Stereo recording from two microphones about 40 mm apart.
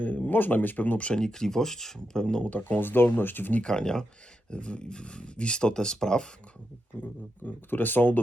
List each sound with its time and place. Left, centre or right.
0.0 s speech: left
1.2 s speech: centre
2.4 s speech: left
3.6 s speech: left
7.0 s speech: left